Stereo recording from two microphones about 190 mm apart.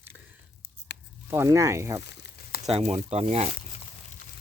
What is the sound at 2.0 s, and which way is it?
Crumpling, 60° left (ahead or behind).